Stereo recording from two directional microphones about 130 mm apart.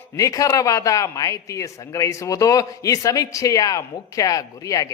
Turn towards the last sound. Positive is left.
turn(degrees=25)  # may be behind; listen again after turning